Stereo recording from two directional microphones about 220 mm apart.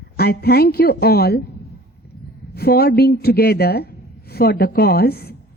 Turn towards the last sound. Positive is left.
turn(degrees=45)  # may be behind; listen again after turning